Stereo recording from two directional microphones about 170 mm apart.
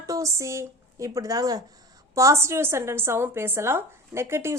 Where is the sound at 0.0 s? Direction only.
20° right (ahead or behind).